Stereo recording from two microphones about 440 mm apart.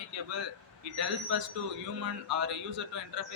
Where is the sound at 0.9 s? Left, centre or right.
Right.